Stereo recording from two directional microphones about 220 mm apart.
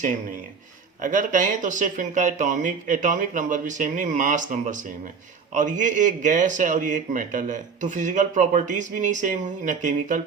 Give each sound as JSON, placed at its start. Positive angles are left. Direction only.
{"t": 1.0, "sound": "a man's voice", "side_deg": -35}